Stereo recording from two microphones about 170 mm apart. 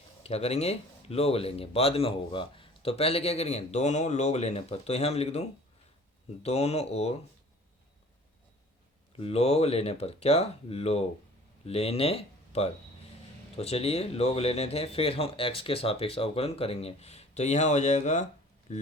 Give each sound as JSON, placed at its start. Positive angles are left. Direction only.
{"t": 0.2, "sound": "speech", "side_deg": 35}
{"t": 9.1, "sound": "speech", "side_deg": 35}